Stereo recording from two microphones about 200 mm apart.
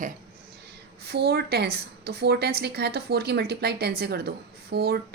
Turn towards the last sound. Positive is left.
turn(degrees=-50)  # may be behind; listen again after turning